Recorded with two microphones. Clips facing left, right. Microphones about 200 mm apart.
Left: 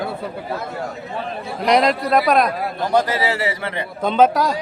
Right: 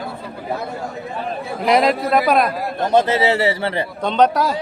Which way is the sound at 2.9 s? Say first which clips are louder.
Right 4 dB; 25° right (ahead or behind).